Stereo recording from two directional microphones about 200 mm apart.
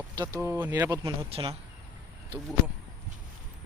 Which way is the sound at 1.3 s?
30° right (ahead or behind).